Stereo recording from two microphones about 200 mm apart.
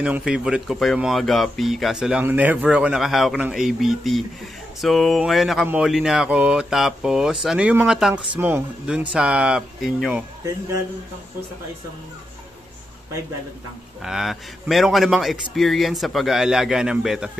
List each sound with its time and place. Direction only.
0.0 s speech: 5° right (ahead or behind)
14.0 s speech: centre (ahead or behind)